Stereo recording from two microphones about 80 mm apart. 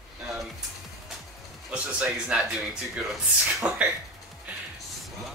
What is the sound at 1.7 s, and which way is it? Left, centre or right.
Speech, centre.